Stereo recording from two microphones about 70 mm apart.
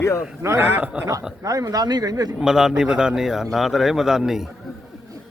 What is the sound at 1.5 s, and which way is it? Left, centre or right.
Speech, right.